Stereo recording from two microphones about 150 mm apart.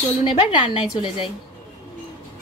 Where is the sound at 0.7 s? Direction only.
35° left (ahead or behind).